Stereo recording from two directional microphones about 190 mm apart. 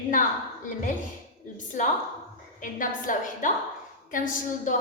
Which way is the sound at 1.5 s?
40° left (ahead or behind).